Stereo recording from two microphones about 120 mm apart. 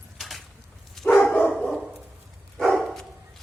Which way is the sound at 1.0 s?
5° left (ahead or behind).